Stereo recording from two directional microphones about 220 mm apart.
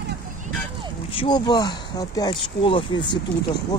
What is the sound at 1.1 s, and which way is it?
Speech, 20° left (ahead or behind).